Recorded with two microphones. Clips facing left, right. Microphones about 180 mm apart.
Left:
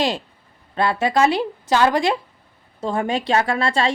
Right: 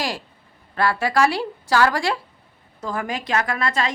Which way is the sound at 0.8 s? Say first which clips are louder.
Left 2 dB; 20° left (ahead or behind).